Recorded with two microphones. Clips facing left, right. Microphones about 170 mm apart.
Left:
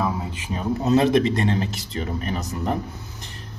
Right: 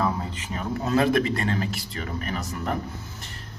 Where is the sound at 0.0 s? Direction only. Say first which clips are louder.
Left 1 dB; 10° left (ahead or behind).